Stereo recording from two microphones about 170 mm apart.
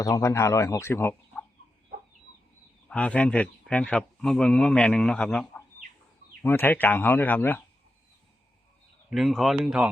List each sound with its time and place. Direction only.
0.0 s speech: 20° left (ahead or behind)
2.9 s speech: 10° left (ahead or behind)
9.0 s speech: centre (ahead or behind)